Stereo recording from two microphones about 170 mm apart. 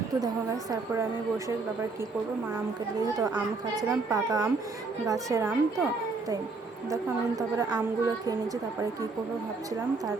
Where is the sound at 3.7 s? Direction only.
20° right (ahead or behind).